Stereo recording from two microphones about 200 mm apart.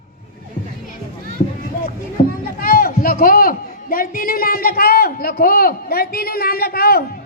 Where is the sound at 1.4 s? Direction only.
45° left (ahead or behind).